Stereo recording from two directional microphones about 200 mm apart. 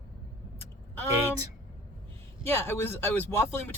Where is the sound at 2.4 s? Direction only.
10° left (ahead or behind).